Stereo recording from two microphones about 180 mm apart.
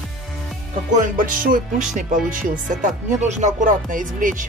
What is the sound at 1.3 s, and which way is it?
Speech, 50° right (ahead or behind).